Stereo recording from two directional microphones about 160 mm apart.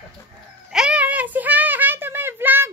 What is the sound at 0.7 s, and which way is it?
A woman's voice, 5° right (ahead or behind).